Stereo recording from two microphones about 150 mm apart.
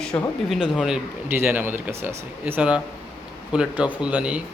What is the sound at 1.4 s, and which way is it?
Speech, 15° right (ahead or behind).